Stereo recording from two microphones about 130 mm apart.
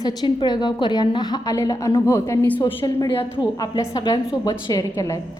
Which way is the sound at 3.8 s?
30° left (ahead or behind).